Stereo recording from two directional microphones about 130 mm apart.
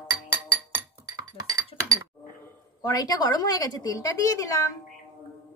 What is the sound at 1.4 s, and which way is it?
Chink, 30° right (ahead or behind).